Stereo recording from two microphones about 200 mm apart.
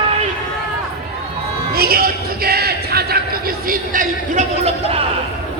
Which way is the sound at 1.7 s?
50° right (ahead or behind).